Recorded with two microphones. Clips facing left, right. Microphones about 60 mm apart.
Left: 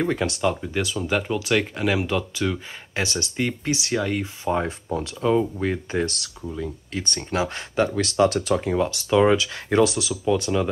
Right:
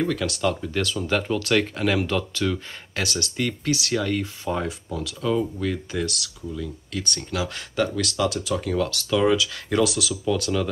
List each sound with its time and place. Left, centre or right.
0.0 s speech: left
0.4 s speech: centre
4.6 s speech: left
8.3 s speech: left
8.5 s speech: left